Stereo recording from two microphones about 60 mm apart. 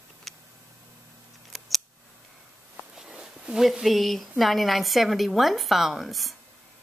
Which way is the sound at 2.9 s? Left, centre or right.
Centre.